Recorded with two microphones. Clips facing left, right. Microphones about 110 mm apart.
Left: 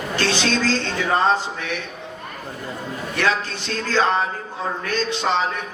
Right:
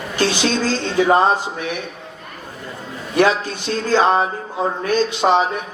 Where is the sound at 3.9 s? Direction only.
20° right (ahead or behind).